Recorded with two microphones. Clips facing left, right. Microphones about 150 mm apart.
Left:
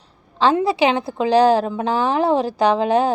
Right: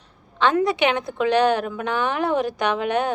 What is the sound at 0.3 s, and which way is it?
A woman's voice, 30° left (ahead or behind).